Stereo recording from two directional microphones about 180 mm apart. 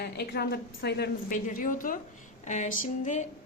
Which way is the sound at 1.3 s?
50° left (ahead or behind).